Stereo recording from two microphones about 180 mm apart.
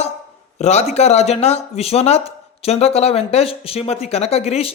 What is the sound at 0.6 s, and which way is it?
Speech, 35° left (ahead or behind).